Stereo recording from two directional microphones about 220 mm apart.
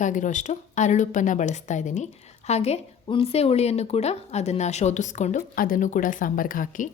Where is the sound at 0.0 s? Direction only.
35° left (ahead or behind).